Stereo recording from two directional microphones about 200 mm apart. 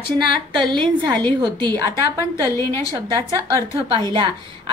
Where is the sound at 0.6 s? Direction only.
20° right (ahead or behind).